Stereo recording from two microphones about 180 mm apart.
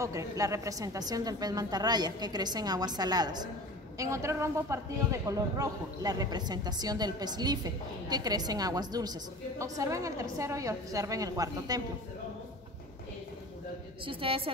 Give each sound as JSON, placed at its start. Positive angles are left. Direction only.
{"t": 0.0, "sound": "a man's voice", "side_deg": -15}
{"t": 14.0, "sound": "a woman's voice", "side_deg": -30}